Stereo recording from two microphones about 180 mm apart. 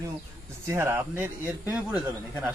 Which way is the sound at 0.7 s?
15° right (ahead or behind).